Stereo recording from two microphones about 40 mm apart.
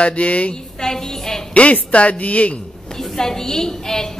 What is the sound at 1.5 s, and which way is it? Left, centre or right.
Speech, left.